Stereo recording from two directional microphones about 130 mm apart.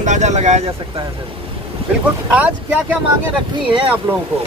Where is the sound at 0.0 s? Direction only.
65° right (ahead or behind).